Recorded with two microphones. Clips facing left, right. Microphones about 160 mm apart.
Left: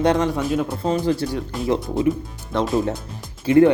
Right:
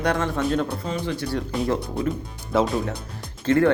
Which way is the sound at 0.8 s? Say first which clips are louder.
Left 7 dB; 35° left (ahead or behind).